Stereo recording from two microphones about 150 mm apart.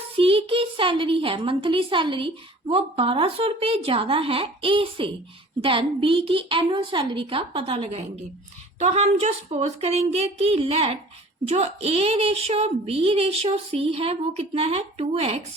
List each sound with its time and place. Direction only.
0.2 s a woman's voice: 40° right (ahead or behind)